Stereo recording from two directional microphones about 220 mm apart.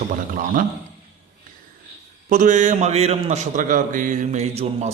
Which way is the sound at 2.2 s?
35° right (ahead or behind).